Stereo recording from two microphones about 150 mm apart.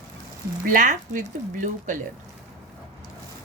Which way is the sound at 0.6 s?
60° right (ahead or behind).